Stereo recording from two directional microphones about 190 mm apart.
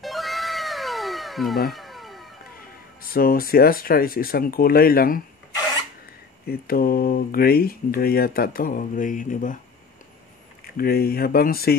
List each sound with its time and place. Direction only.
0.0 s cat: centre (ahead or behind)
1.7 s a sound: centre (ahead or behind)
3.0 s speech: 50° left (ahead or behind)
6.4 s speech: 50° left (ahead or behind)
10.8 s speech: 50° left (ahead or behind)